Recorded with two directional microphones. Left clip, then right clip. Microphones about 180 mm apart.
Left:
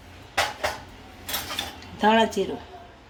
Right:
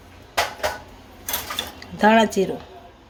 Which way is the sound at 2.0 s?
45° right (ahead or behind).